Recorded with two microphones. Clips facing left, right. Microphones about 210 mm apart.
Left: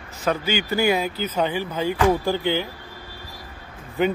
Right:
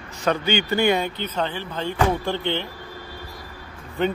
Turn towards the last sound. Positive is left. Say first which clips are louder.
# left 2 dB
turn(degrees=5)  # may be behind; listen again after turning